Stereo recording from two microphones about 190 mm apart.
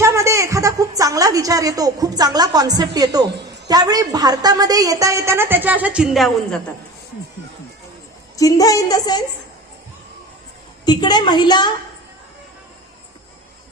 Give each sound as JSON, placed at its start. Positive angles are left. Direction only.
{"t": 0.0, "sound": "a woman's voice", "side_deg": -15}
{"t": 3.2, "sound": "a sound", "side_deg": -60}
{"t": 3.7, "sound": "a woman's voice", "side_deg": -20}
{"t": 8.4, "sound": "speech", "side_deg": 20}
{"t": 10.8, "sound": "speech", "side_deg": 25}